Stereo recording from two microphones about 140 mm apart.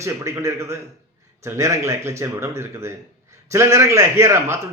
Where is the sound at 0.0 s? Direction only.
20° right (ahead or behind).